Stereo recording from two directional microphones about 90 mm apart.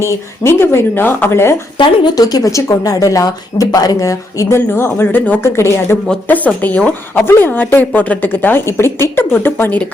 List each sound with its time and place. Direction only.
0.0 s speech: 30° left (ahead or behind)
2.1 s speech: 45° left (ahead or behind)
4.7 s speech: 25° left (ahead or behind)
5.4 s speech: 30° left (ahead or behind)
6.2 s speech: 20° left (ahead or behind)